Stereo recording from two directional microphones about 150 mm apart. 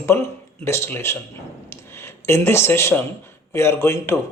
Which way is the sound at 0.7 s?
15° left (ahead or behind).